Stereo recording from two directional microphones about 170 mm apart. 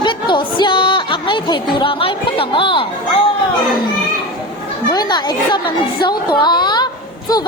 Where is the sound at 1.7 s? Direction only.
30° left (ahead or behind).